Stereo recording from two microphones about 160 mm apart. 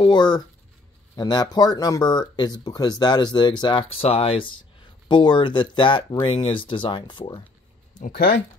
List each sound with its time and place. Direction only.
0.0 s speech: 25° left (ahead or behind)
8.0 s speech: 70° left (ahead or behind)